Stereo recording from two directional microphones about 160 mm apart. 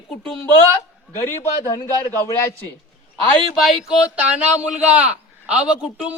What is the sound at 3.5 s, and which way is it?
A man's voice, centre (ahead or behind).